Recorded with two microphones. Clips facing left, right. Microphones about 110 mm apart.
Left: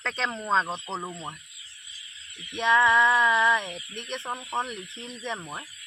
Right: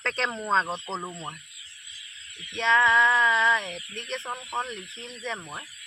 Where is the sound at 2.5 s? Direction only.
15° left (ahead or behind).